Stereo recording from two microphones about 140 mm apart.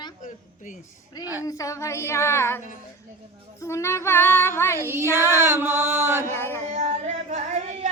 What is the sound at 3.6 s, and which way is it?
Child singing, 20° left (ahead or behind).